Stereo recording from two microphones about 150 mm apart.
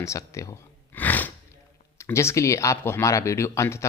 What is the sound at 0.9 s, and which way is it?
Gasp, 10° left (ahead or behind).